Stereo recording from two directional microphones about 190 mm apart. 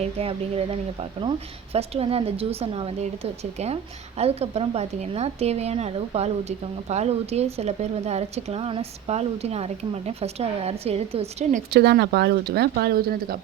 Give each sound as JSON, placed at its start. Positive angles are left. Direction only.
{"t": 0.0, "sound": "speech", "side_deg": -30}
{"t": 4.2, "sound": "speech", "side_deg": -35}
{"t": 11.7, "sound": "speech", "side_deg": -60}